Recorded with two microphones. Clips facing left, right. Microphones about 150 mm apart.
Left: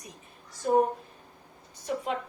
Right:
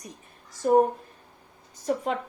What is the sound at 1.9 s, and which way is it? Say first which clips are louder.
Speech: right 5 dB; 45° right (ahead or behind).